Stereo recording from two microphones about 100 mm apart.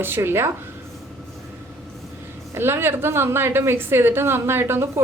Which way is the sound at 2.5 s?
25° right (ahead or behind).